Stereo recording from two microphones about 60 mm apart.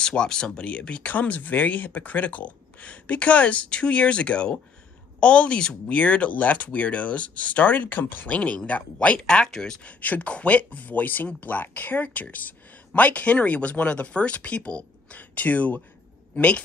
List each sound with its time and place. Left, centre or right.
0.0 s speech: centre; by 8.4 s left
8.4 s speech: left
9.2 s speech: centre
9.9 s speech: left